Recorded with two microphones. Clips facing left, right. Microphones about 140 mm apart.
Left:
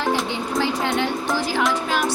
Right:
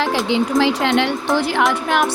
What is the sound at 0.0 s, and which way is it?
Speech, 90° right.